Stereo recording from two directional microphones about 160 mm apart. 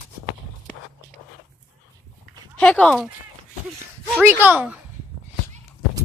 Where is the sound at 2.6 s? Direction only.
10° left (ahead or behind).